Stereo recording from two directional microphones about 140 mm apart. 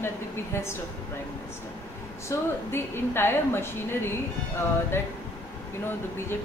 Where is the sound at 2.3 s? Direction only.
15° left (ahead or behind).